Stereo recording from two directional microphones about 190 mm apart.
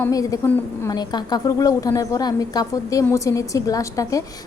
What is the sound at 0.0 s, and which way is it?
A woman's voice, 20° left (ahead or behind).